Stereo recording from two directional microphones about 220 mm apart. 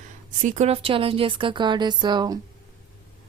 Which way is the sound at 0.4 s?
35° right (ahead or behind).